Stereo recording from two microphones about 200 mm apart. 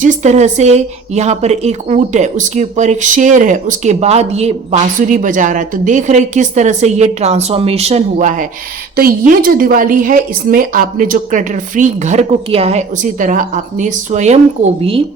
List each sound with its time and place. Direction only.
0.0 s speech: 35° right (ahead or behind)